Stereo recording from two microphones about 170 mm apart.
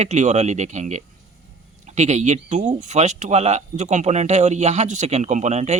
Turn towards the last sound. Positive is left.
turn(degrees=-40)  # may be behind; listen again after turning